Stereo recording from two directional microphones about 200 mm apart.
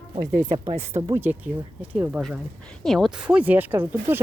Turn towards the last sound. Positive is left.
turn(degrees=-10)  # may be behind; listen again after turning